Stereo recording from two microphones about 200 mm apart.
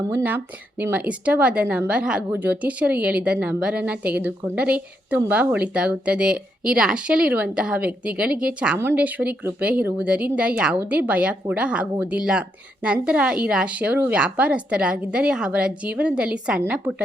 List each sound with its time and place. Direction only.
0.1 s speech: 10° right (ahead or behind)